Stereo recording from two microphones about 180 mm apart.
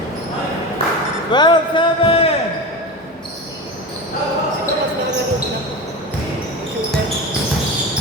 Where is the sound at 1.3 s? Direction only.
25° left (ahead or behind).